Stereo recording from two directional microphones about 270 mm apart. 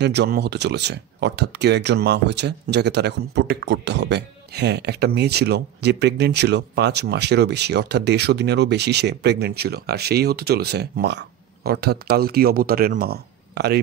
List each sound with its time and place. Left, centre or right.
0.0 s speech: right